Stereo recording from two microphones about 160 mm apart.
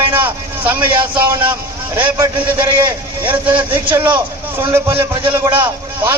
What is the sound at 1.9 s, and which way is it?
A man's voice, 15° right (ahead or behind).